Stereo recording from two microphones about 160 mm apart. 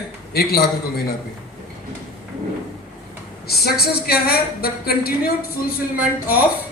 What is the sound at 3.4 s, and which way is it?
A man's voice, 80° left.